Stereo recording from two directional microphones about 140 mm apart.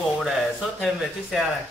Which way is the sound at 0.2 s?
Centre (ahead or behind).